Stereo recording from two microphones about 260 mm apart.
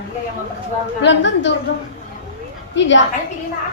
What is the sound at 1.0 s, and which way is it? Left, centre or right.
Speech, left.